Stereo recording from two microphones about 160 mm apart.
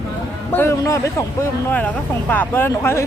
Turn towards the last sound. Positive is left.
turn(degrees=15)  # may be behind; listen again after turning